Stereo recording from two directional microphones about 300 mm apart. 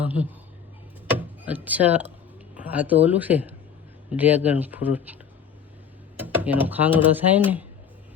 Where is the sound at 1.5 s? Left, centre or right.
Centre.